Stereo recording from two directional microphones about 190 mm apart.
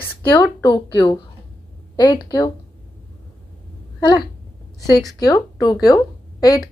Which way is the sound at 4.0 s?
20° left (ahead or behind).